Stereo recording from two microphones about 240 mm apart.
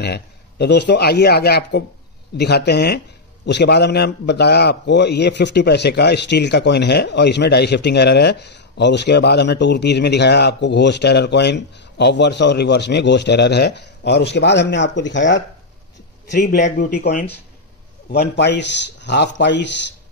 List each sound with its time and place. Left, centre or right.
0.0 s a man's voice: left